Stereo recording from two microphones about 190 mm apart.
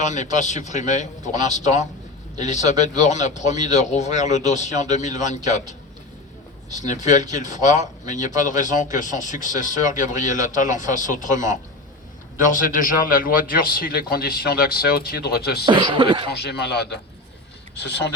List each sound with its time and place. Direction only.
0.0 s speech: 40° left (ahead or behind)
6.7 s speech: 40° left (ahead or behind)
12.5 s a man's voice: 45° left (ahead or behind)
15.6 s speech: 25° right (ahead or behind)
16.3 s speech: 55° left (ahead or behind)